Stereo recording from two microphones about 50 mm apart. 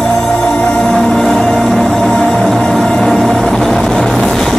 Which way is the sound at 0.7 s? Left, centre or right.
Centre.